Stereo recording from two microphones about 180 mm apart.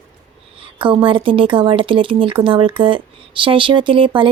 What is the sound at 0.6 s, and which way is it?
Speech, 30° right (ahead or behind).